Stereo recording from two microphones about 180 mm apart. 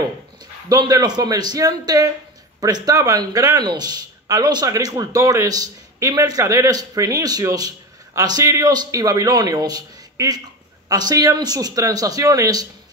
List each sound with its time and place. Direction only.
0.7 s speech: 20° right (ahead or behind)